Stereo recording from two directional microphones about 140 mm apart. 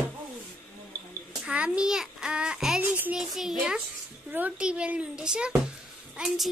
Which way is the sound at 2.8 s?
15° right (ahead or behind).